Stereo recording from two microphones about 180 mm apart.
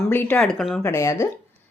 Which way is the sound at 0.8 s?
15° left (ahead or behind).